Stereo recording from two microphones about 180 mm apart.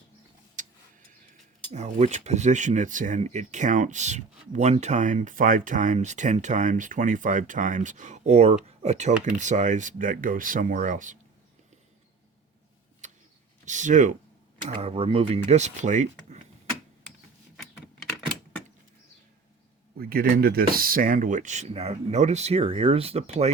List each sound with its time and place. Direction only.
0.6 s vehicle: 45° right (ahead or behind)
1.7 s speech: 40° right (ahead or behind)
13.7 s speech: 45° right (ahead or behind)
14.8 s speech: 35° right (ahead or behind)
20.0 s speech: 60° right (ahead or behind); by 23.5 s 35° right (ahead or behind)